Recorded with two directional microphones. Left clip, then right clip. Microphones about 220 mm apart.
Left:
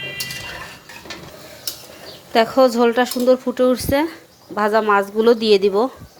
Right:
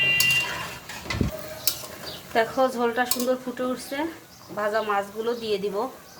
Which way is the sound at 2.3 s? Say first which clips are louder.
Left 8 dB; 35° left (ahead or behind).